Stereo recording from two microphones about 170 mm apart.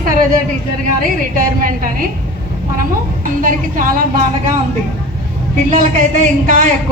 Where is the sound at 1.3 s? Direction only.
55° right (ahead or behind).